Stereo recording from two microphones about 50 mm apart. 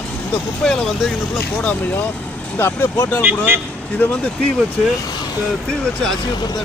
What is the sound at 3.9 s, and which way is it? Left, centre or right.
Speech, left.